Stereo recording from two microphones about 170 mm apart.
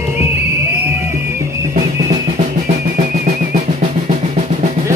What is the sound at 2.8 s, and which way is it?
Drum, 60° right (ahead or behind).